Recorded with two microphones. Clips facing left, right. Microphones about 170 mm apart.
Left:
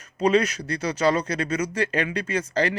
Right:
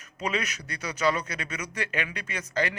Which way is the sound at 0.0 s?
30° left (ahead or behind).